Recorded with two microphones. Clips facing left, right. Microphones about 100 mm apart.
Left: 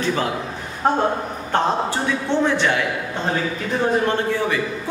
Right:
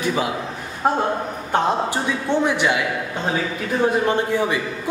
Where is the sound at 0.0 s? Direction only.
15° right (ahead or behind).